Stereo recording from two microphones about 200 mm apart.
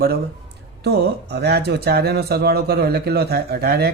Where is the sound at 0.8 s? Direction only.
55° right (ahead or behind).